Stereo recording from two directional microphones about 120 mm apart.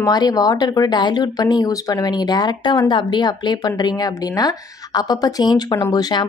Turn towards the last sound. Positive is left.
turn(degrees=35)  # may be behind; listen again after turning